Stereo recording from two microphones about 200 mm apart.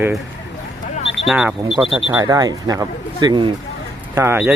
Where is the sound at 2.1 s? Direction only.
15° right (ahead or behind).